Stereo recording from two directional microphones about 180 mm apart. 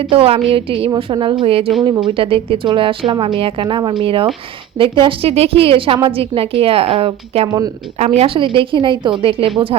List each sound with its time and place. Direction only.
0.0 s a woman's voice: 30° right (ahead or behind)